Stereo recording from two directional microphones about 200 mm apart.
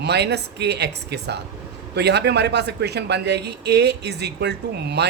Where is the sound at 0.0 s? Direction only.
55° right (ahead or behind).